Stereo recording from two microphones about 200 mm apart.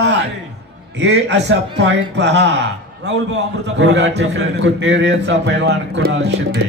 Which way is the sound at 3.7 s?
65° right (ahead or behind).